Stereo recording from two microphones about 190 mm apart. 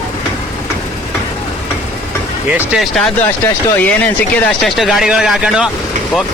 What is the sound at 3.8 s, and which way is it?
Speech, 10° left (ahead or behind).